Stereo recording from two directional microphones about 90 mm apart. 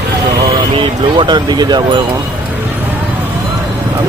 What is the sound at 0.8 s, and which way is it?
Speech, 60° right (ahead or behind).